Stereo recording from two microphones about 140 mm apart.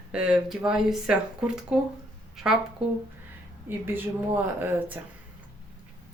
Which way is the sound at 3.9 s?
15° right (ahead or behind).